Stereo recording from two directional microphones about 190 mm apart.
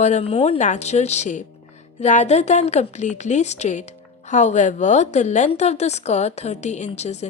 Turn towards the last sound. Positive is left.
turn(degrees=35)  # may be behind; listen again after turning